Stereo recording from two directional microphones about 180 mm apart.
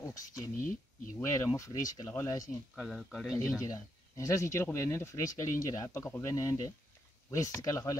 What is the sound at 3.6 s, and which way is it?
Speech, 20° left (ahead or behind).